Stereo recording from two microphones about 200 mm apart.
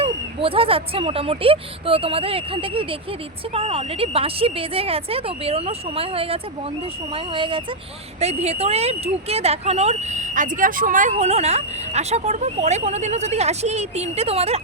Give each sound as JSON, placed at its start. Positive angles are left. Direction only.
{"t": 0.0, "sound": "speech", "side_deg": -30}